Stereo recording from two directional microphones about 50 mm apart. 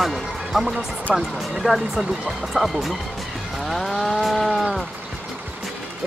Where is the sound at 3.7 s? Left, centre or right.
Centre.